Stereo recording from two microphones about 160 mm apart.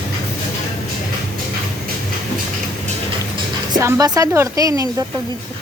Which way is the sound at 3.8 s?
20° right (ahead or behind).